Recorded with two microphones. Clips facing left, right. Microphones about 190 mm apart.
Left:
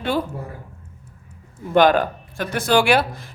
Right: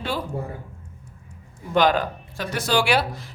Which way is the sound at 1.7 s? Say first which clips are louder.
Left 4 dB; 55° left (ahead or behind).